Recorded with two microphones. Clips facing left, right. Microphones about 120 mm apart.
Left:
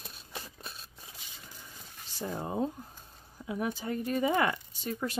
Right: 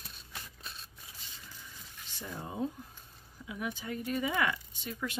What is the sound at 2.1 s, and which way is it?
Speech, 35° left (ahead or behind).